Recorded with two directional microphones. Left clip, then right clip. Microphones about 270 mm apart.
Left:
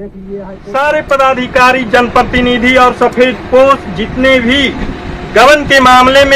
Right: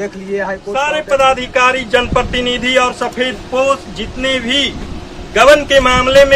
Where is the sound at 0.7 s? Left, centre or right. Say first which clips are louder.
Left 4 dB; centre.